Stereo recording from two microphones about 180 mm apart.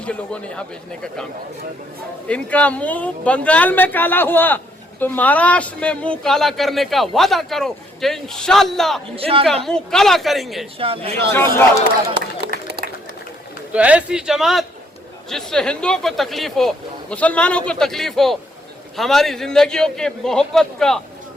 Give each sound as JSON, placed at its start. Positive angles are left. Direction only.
{"t": 0.0, "sound": "speech", "side_deg": 5}
{"t": 9.1, "sound": "speech", "side_deg": -30}
{"t": 9.6, "sound": "speech", "side_deg": 5}
{"t": 10.8, "sound": "speech", "side_deg": -30}
{"t": 11.3, "sound": "speech", "side_deg": 15}
{"t": 12.1, "sound": "run", "side_deg": -60}
{"t": 13.7, "sound": "speech", "side_deg": -5}